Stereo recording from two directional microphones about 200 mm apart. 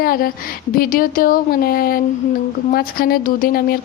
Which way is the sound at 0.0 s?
45° left (ahead or behind).